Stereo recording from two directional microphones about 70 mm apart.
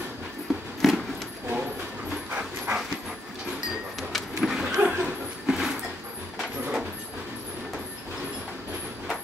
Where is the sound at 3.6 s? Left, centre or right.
Centre.